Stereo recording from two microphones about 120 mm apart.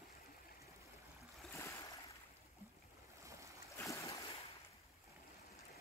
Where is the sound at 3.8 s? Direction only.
25° left (ahead or behind).